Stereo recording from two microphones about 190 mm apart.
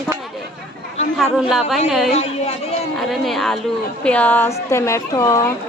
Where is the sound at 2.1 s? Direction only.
35° left (ahead or behind).